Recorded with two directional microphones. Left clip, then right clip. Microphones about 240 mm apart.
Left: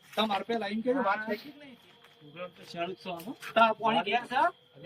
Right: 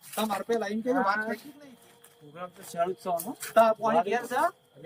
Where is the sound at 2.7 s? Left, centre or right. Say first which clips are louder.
Right 7 dB; centre.